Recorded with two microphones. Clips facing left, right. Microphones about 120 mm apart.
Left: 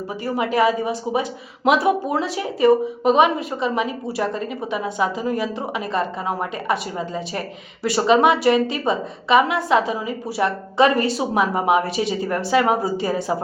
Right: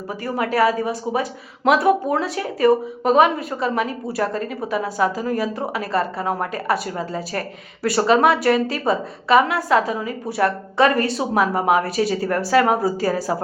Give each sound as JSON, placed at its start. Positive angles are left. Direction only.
{"t": 0.3, "sound": "a woman's voice", "side_deg": 20}
{"t": 1.6, "sound": "speech", "side_deg": 0}
{"t": 2.4, "sound": "a woman's voice", "side_deg": 20}
{"t": 11.0, "sound": "speech", "side_deg": 0}
{"t": 11.7, "sound": "a woman's voice", "side_deg": 20}
{"t": 12.8, "sound": "a woman's voice", "side_deg": 20}